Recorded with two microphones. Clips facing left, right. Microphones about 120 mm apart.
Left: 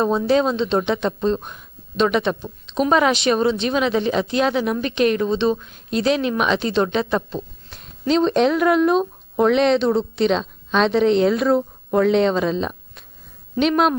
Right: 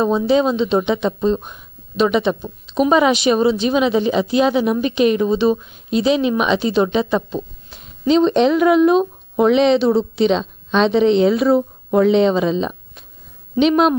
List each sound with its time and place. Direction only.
0.0 s speech: centre (ahead or behind)